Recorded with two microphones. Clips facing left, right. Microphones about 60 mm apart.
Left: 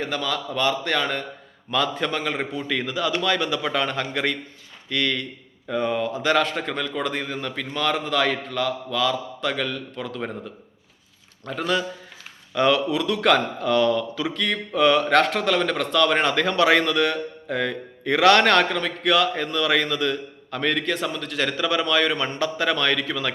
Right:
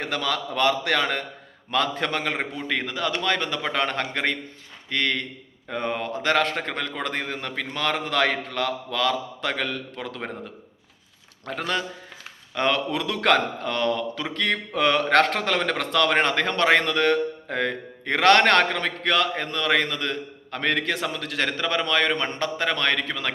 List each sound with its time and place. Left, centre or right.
0.0 s a man's voice: right
1.7 s a man's voice: right
11.4 s a man's voice: right
12.5 s a man's voice: right
12.9 s a man's voice: right
13.7 s a man's voice: right
14.3 s a man's voice: right
21.4 s a man's voice: right